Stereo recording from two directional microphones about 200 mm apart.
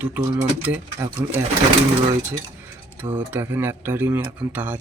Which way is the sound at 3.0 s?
10° right (ahead or behind).